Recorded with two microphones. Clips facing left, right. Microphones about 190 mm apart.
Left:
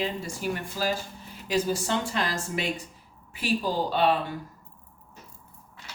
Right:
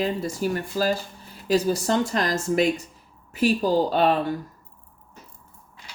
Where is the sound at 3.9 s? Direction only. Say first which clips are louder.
Right 3 dB; 45° right (ahead or behind).